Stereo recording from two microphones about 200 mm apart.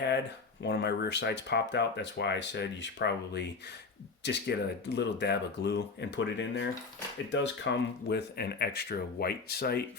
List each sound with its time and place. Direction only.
0.6 s speech: 55° left (ahead or behind)